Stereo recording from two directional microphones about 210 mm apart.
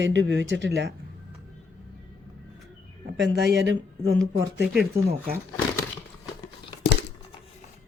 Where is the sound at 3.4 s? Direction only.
55° right (ahead or behind).